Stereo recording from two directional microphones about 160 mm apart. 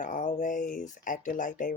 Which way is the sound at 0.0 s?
55° left (ahead or behind).